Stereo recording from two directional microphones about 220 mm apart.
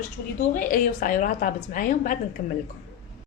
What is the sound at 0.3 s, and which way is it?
A woman's voice, 40° left (ahead or behind).